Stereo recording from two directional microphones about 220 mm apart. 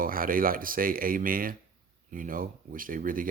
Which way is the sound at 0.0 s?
40° right (ahead or behind).